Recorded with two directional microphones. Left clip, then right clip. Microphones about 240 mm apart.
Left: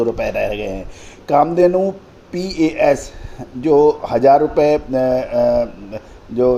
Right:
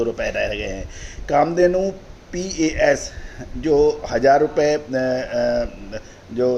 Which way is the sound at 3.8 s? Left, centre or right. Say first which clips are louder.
Left 4 dB; left.